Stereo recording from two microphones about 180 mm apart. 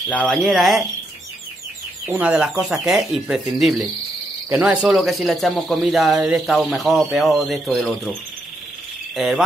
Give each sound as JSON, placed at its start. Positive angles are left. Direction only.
{"t": 0.1, "sound": "speech", "side_deg": 5}
{"t": 2.0, "sound": "speech", "side_deg": -10}
{"t": 9.1, "sound": "speech", "side_deg": 0}